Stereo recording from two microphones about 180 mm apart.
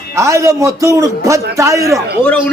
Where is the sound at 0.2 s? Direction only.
15° right (ahead or behind).